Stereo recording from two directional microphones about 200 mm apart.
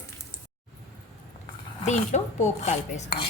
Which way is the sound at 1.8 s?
35° left (ahead or behind).